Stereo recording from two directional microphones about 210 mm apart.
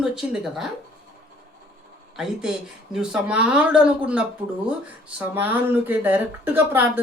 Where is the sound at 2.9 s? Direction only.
5° right (ahead or behind).